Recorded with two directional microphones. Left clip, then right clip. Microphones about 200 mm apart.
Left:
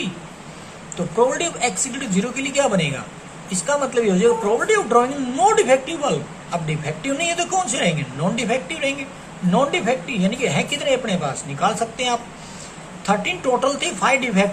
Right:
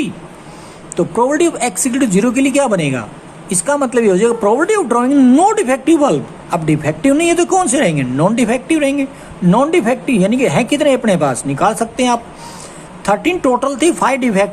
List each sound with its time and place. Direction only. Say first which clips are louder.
1.3 s speech: right 7 dB; 60° right (ahead or behind)